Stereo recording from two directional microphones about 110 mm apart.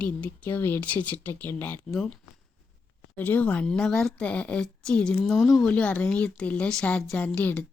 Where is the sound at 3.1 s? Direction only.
15° left (ahead or behind).